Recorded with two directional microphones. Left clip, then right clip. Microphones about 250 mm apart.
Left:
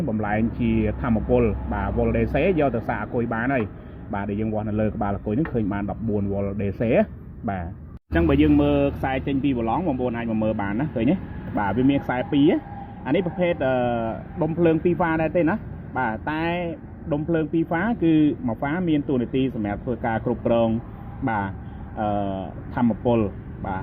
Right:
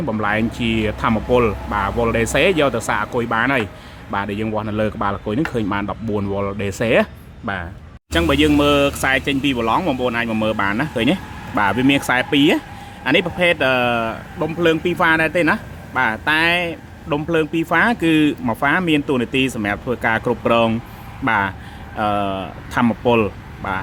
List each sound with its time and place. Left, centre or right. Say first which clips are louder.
0.2 s speech: right 6 dB; centre
21.2 s speech: right 8 dB; right